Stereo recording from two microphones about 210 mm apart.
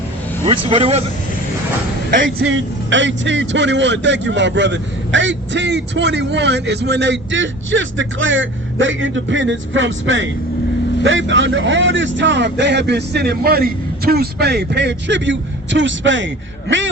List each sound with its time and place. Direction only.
0.4 s speech: 25° right (ahead or behind)
2.4 s a man's voice: 60° right (ahead or behind)